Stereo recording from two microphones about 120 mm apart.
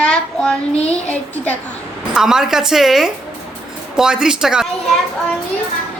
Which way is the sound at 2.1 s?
5° right (ahead or behind).